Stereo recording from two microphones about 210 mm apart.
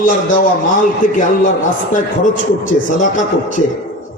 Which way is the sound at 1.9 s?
40° left (ahead or behind).